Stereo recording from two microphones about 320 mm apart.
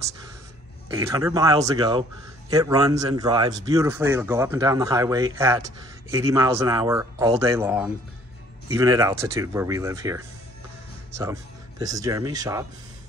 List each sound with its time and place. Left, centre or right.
0.8 s speech: centre
11.8 s speech: centre